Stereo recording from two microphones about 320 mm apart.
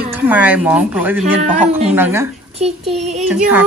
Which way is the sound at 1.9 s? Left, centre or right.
Centre.